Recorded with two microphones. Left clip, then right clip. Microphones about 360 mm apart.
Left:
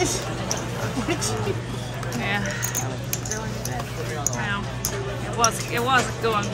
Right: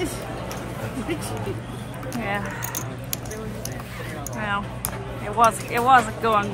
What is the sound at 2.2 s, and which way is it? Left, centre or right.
Speech, centre.